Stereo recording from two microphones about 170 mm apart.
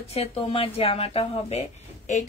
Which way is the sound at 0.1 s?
35° left (ahead or behind).